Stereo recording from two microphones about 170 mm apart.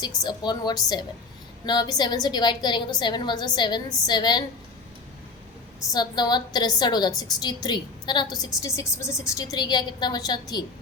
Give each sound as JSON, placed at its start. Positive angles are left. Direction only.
{"t": 0.2, "sound": "a woman's voice", "side_deg": 25}
{"t": 5.9, "sound": "a woman's voice", "side_deg": 25}